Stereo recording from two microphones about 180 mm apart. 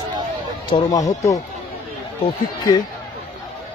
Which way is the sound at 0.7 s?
20° left (ahead or behind).